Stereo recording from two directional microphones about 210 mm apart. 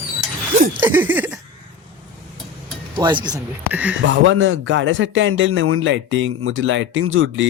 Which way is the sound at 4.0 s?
65° right (ahead or behind).